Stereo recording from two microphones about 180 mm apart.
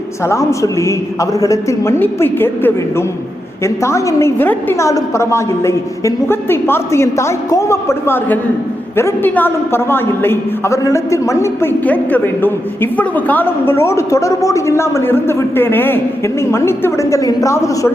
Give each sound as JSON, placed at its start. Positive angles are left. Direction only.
{"t": 0.3, "sound": "a man's voice", "side_deg": 15}